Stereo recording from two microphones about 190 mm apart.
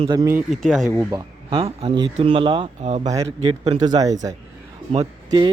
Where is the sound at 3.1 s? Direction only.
20° right (ahead or behind).